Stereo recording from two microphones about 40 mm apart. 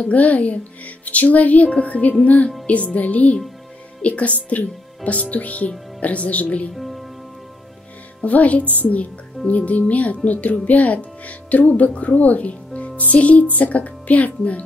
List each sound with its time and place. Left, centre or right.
0.0 s a child's voice: left
6.7 s music: centre
8.2 s a child's voice: left